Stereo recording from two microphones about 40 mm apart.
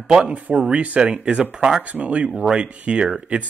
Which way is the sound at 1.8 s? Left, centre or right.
Right.